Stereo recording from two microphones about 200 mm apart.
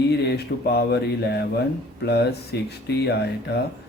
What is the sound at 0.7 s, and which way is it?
Speech, 55° left (ahead or behind).